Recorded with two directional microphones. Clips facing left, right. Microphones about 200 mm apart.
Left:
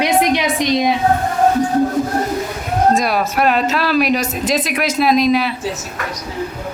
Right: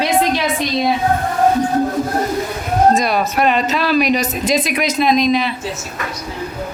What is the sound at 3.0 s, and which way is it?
Speech, 5° left (ahead or behind).